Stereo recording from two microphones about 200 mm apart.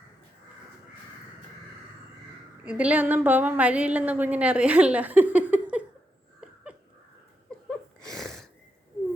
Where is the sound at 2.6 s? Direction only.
5° right (ahead or behind).